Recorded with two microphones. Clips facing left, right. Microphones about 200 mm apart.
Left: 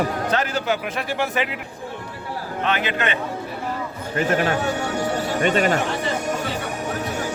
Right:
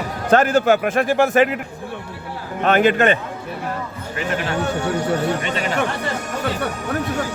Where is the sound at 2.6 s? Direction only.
50° right (ahead or behind).